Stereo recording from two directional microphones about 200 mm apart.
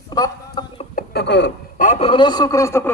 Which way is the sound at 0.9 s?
55° left (ahead or behind).